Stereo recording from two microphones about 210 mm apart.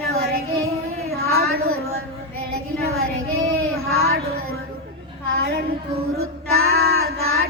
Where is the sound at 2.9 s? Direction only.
80° right.